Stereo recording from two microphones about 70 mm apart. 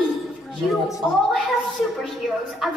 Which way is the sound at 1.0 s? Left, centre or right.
Centre.